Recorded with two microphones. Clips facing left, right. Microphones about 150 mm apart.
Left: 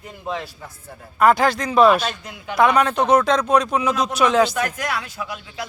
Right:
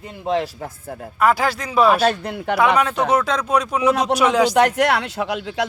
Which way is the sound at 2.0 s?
60° right (ahead or behind).